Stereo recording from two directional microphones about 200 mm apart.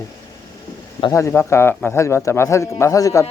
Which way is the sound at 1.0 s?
15° left (ahead or behind).